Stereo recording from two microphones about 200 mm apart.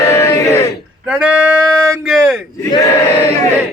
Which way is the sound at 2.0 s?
Centre (ahead or behind).